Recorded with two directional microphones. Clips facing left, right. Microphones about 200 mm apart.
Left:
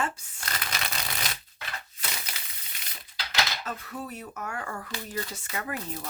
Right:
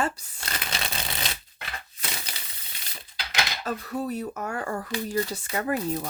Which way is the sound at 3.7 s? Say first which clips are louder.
Right 7 dB; 35° right (ahead or behind).